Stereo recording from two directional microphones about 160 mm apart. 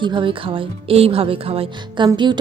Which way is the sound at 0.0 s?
30° right (ahead or behind).